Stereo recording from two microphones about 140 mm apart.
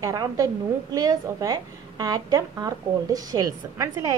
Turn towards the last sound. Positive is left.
turn(degrees=-25)  # may be behind; listen again after turning